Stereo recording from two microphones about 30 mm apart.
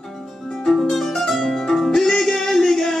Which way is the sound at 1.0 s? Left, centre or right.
Centre.